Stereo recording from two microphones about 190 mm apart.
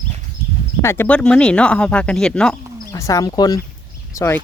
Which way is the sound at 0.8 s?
10° left (ahead or behind).